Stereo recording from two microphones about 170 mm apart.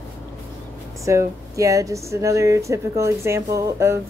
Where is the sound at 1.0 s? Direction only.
20° right (ahead or behind).